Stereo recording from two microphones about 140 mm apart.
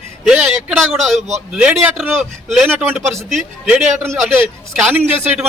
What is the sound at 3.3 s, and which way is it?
A man's voice, 5° right (ahead or behind).